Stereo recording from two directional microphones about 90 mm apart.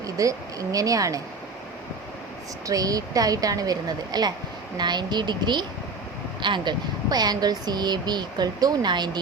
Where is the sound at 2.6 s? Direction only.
40° right (ahead or behind).